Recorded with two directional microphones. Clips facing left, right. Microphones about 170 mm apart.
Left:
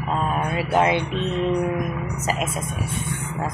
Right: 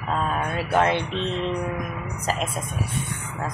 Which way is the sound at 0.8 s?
10° left (ahead or behind).